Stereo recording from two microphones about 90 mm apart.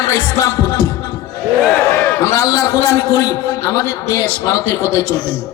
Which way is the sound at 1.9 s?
25° left (ahead or behind).